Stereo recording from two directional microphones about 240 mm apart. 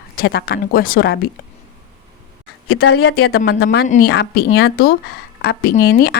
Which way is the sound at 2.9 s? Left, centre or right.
Left.